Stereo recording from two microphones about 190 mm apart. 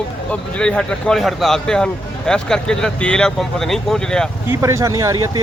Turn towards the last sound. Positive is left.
turn(degrees=-15)  # may be behind; listen again after turning